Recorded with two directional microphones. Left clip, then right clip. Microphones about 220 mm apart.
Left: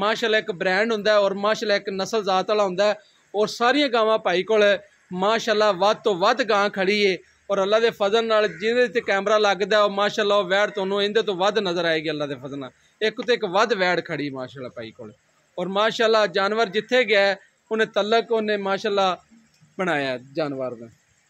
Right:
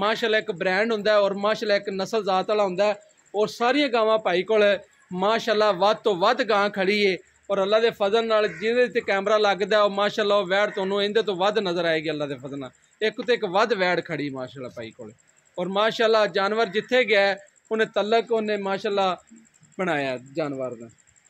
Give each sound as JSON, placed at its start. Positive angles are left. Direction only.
{"t": 0.0, "sound": "a man's voice", "side_deg": 15}